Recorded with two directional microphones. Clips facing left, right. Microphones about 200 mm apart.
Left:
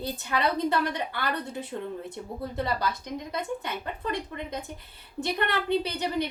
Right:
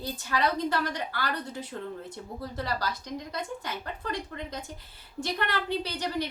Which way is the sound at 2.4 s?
25° left (ahead or behind).